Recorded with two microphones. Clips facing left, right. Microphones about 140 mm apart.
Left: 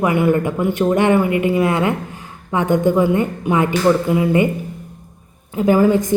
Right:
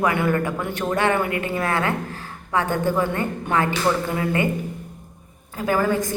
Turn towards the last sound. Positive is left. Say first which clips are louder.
# left 7 dB
turn(degrees=20)  # may be behind; listen again after turning